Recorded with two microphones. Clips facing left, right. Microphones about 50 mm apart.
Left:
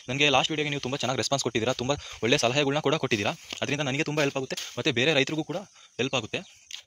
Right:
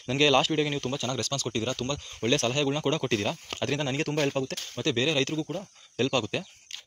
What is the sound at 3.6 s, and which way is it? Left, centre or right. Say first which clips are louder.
Speech: even; left.